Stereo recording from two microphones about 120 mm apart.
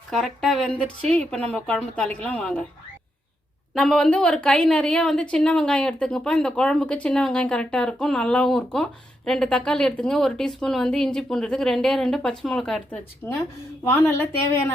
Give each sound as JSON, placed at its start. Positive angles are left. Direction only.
{"t": 0.1, "sound": "a woman's voice", "side_deg": 0}
{"t": 3.8, "sound": "a woman's voice", "side_deg": 5}
{"t": 13.2, "sound": "a woman's voice", "side_deg": 20}